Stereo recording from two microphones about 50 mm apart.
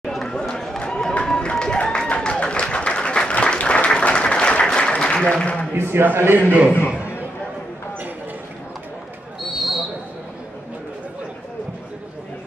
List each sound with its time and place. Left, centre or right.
0.0 s run: centre
1.2 s applause: centre
5.8 s a man's voice: right
9.6 s a sound: centre